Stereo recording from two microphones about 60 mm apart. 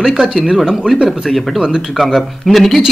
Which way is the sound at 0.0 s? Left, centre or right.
Centre.